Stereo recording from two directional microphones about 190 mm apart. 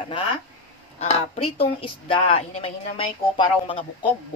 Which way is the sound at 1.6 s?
30° left (ahead or behind).